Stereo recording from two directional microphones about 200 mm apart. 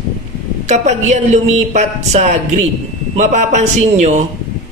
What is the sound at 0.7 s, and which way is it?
A man's voice, 35° right (ahead or behind).